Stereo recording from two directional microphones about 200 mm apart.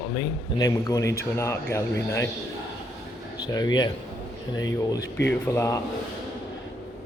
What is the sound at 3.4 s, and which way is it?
Speech, 20° left (ahead or behind).